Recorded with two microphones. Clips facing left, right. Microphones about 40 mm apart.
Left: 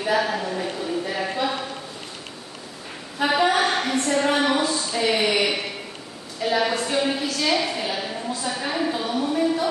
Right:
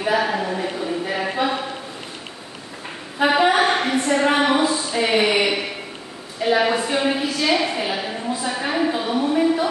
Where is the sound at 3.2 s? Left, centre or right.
Centre.